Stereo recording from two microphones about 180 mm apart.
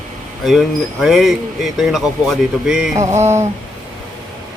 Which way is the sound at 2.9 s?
15° right (ahead or behind).